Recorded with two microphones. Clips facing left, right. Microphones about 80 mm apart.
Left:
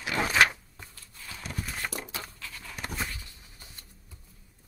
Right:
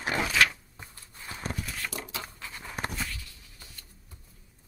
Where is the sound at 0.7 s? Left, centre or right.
Right.